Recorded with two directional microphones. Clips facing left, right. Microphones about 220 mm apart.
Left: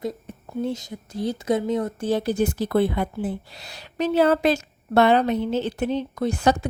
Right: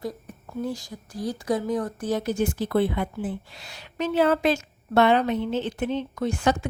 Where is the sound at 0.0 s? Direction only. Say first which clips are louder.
Left 3 dB; 25° left (ahead or behind).